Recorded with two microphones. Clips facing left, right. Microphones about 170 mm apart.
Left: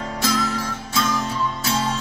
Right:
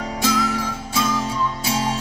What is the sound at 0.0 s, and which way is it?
Music, 10° right (ahead or behind).